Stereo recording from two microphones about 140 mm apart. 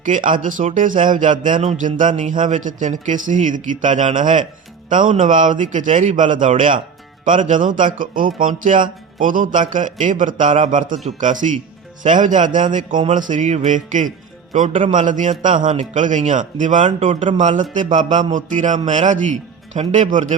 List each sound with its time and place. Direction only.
0.0 s a man's voice: 70° right (ahead or behind)
8.4 s a man's voice: 70° right (ahead or behind)